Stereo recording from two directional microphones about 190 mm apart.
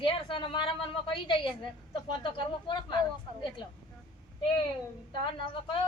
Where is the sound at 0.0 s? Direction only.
25° left (ahead or behind).